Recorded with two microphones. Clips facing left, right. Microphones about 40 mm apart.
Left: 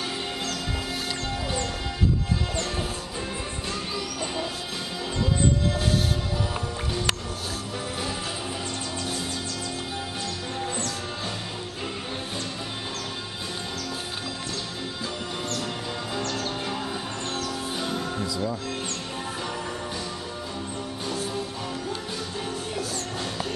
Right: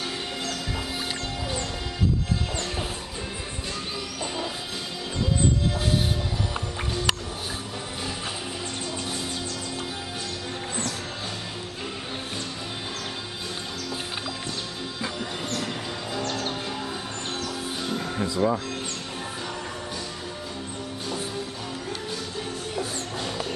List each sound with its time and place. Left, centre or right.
17.8 s music: centre
18.2 s music: right